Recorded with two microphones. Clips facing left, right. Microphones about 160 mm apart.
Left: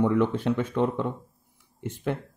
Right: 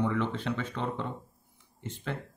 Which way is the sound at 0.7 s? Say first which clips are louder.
Left 8 dB; 55° left (ahead or behind).